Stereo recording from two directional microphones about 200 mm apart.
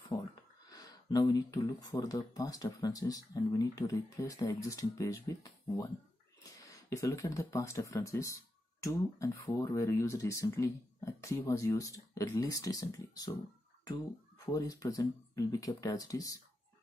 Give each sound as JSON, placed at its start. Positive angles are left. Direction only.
{"t": 0.1, "sound": "a sound", "side_deg": 15}
{"t": 0.7, "sound": "speech", "side_deg": 20}
{"t": 6.9, "sound": "speech", "side_deg": 15}
{"t": 14.4, "sound": "speech", "side_deg": 15}